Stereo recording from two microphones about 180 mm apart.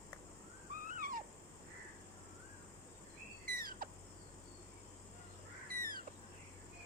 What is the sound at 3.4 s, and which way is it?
Bird vocalization, 55° right (ahead or behind).